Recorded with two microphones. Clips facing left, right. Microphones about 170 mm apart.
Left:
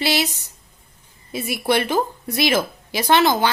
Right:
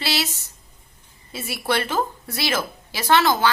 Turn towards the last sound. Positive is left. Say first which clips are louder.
# left 2 dB
turn(degrees=20)  # may be behind; listen again after turning